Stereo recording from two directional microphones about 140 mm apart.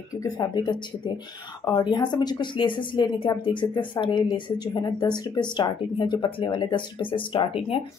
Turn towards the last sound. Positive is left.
turn(degrees=40)  # may be behind; listen again after turning